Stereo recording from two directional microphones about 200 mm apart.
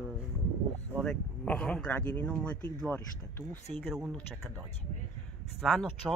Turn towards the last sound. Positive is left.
turn(degrees=0)  # may be behind; listen again after turning